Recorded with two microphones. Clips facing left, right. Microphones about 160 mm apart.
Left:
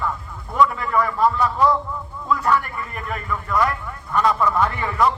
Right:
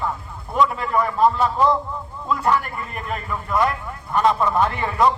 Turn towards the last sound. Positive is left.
turn(degrees=-25)  # may be behind; listen again after turning